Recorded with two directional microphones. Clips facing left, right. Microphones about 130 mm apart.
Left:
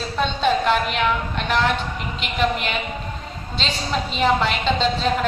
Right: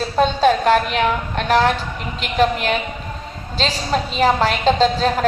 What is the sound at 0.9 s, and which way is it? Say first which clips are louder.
Speech: right 3 dB; 40° right (ahead or behind).